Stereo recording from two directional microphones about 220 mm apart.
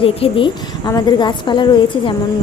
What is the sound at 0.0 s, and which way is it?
A woman's voice, 25° left (ahead or behind).